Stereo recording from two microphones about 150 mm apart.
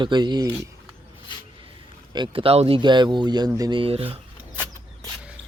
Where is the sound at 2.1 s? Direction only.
35° right (ahead or behind).